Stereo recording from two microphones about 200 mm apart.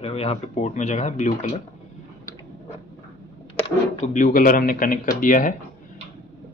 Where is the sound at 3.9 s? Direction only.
35° left (ahead or behind).